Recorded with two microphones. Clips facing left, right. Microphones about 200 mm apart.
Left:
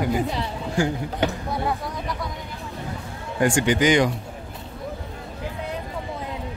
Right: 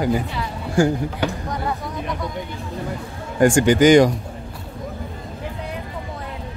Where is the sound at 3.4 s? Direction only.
45° right (ahead or behind).